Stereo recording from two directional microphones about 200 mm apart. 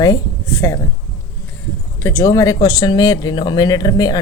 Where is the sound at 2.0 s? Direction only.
15° left (ahead or behind).